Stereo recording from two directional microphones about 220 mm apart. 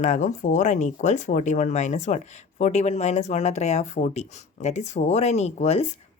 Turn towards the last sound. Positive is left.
turn(degrees=30)  # may be behind; listen again after turning